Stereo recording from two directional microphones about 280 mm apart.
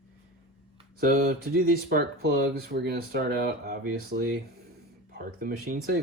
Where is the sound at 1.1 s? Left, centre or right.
Right.